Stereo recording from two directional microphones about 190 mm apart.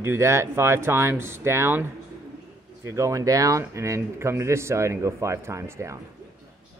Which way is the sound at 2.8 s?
15° right (ahead or behind).